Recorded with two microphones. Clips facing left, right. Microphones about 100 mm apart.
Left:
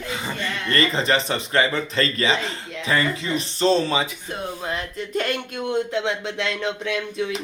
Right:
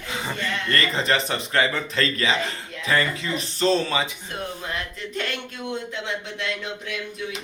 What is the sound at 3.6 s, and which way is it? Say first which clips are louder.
Speech: left 2 dB; 25° left (ahead or behind).